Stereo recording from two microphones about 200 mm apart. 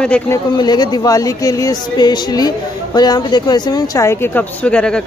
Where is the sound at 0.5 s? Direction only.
20° left (ahead or behind).